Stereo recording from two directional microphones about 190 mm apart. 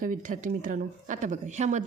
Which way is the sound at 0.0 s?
45° right (ahead or behind).